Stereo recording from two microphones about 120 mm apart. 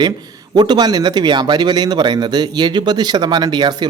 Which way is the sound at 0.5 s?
35° right (ahead or behind).